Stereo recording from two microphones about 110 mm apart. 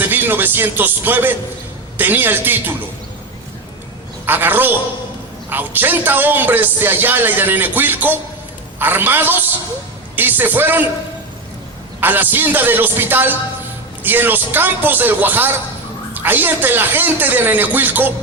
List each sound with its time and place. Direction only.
0.0 s a man's voice: 20° right (ahead or behind)
4.3 s a man's voice: 20° right (ahead or behind)
11.9 s a man's voice: 15° right (ahead or behind)